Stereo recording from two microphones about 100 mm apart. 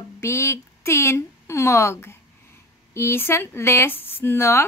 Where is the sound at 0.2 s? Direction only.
30° left (ahead or behind).